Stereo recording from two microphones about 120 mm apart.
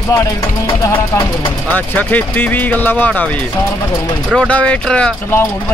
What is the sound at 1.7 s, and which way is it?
Speech, 15° left (ahead or behind).